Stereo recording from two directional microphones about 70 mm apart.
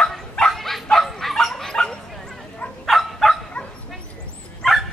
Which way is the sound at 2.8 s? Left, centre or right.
Centre.